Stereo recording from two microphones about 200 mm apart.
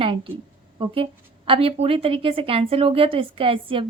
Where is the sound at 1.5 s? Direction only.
30° right (ahead or behind).